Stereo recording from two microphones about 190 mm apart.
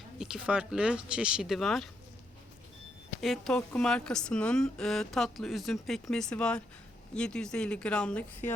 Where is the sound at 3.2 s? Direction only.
Centre (ahead or behind).